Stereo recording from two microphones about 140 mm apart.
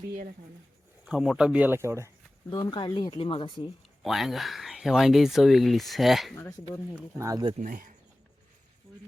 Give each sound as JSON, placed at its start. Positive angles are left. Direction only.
{"t": 1.0, "sound": "speech", "side_deg": 0}
{"t": 2.5, "sound": "speech", "side_deg": 30}
{"t": 4.0, "sound": "speech", "side_deg": 0}
{"t": 7.2, "sound": "speech", "side_deg": -25}
{"t": 7.6, "sound": "speech", "side_deg": -75}